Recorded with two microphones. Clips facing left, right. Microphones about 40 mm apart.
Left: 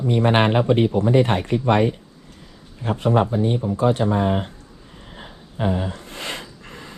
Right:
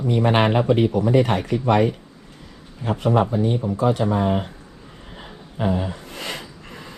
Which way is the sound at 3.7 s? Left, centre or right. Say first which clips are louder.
Left 1 dB; left.